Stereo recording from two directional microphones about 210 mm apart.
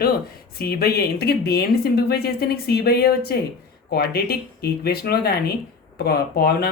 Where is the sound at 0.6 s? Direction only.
45° left (ahead or behind).